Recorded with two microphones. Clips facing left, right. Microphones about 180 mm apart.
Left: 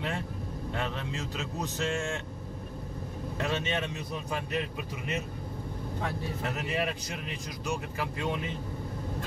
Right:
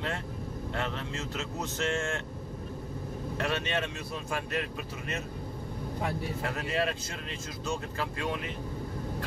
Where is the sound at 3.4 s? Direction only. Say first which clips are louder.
Even; 20° left (ahead or behind).